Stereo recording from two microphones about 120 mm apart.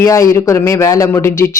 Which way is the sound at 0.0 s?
30° left (ahead or behind).